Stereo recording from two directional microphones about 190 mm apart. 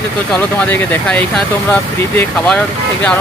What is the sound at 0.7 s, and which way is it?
Speech, 5° left (ahead or behind).